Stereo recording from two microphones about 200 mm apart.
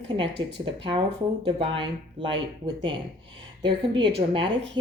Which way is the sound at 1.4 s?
25° right (ahead or behind).